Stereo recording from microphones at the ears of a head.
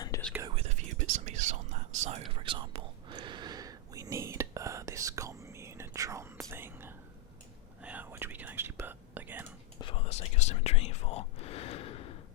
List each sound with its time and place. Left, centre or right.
0.4 s whispering: right
8.3 s whispering: right
9.7 s whispering: left